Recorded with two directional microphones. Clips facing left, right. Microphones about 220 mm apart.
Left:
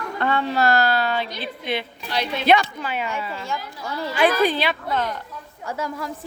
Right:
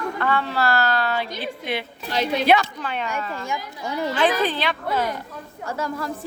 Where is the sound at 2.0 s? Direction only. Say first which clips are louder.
Right 3 dB; 40° right (ahead or behind).